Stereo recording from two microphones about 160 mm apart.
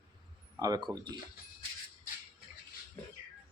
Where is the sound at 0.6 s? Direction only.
25° right (ahead or behind).